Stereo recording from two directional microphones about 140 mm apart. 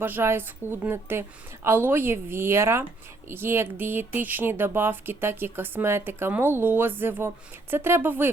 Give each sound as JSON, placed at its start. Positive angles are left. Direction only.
{"t": 0.0, "sound": "speech", "side_deg": -15}